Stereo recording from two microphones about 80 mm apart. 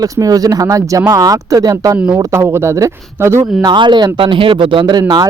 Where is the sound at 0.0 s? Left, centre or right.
Right.